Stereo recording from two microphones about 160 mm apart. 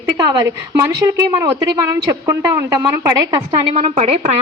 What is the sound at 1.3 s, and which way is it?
Speech, 20° right (ahead or behind).